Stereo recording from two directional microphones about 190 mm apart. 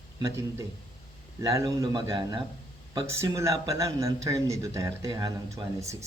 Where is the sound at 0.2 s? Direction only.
15° right (ahead or behind).